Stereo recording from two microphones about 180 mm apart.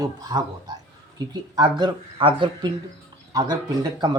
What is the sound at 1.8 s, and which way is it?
Speech, 30° right (ahead or behind).